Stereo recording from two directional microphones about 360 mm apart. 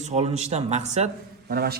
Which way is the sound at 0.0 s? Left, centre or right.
Centre.